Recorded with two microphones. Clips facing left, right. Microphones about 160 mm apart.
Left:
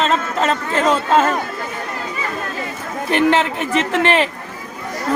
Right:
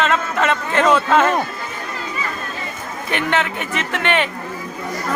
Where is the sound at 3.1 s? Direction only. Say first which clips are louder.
Left 5 dB; 35° left (ahead or behind).